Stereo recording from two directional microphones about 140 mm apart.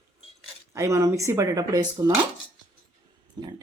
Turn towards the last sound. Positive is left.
turn(degrees=-30)  # may be behind; listen again after turning